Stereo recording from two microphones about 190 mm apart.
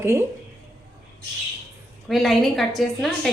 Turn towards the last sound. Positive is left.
turn(degrees=0)  # may be behind; listen again after turning